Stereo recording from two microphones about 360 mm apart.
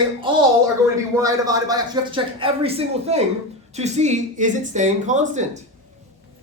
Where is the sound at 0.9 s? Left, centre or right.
Centre.